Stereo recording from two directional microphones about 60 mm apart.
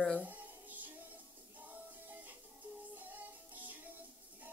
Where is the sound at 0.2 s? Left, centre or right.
Right.